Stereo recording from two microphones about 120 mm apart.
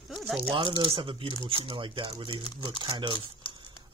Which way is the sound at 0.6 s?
45° right (ahead or behind).